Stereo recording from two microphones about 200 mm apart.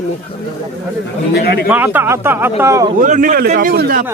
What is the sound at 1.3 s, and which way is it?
Speech, 50° left (ahead or behind).